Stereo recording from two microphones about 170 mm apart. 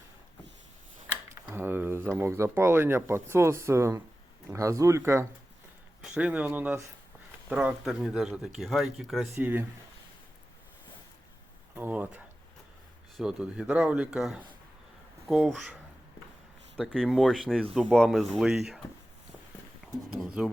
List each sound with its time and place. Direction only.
1.5 s speech: 10° right (ahead or behind)
9.3 s speech: 15° right (ahead or behind)
11.7 s a sound: 10° right (ahead or behind)
13.1 s speech: 5° right (ahead or behind)
16.7 s speech: centre (ahead or behind)
20.1 s speech: 5° right (ahead or behind)